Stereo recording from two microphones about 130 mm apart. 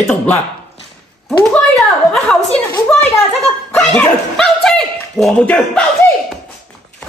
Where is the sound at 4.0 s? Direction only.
5° left (ahead or behind).